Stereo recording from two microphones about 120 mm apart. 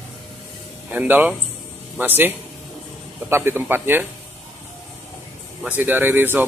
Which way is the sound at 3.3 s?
20° right (ahead or behind).